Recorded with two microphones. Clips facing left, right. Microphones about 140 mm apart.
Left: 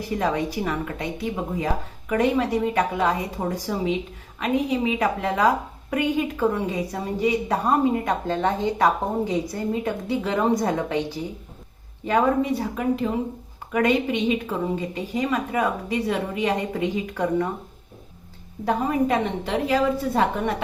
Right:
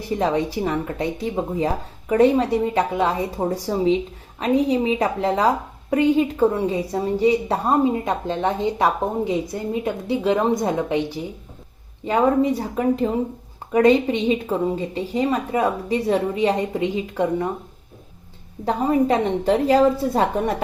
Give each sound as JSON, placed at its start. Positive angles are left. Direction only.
{"t": 0.1, "sound": "a woman's voice", "side_deg": -25}
{"t": 12.0, "sound": "a woman's voice", "side_deg": -25}
{"t": 12.5, "sound": "a woman's voice", "side_deg": -40}
{"t": 18.6, "sound": "a woman's voice", "side_deg": -30}